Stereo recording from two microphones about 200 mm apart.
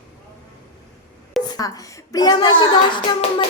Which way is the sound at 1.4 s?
20° left (ahead or behind).